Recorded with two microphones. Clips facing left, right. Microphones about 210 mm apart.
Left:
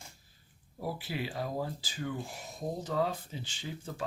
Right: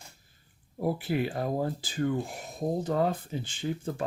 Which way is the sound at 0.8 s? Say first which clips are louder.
Right 8 dB; 55° right (ahead or behind).